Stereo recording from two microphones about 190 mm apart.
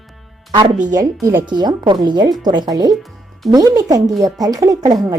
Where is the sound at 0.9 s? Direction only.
15° right (ahead or behind).